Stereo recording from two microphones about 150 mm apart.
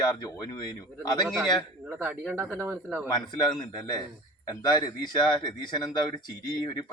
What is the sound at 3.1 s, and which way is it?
Speech, 25° left (ahead or behind).